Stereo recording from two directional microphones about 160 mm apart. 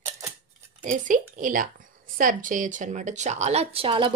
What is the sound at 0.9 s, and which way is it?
Speech, 55° right (ahead or behind).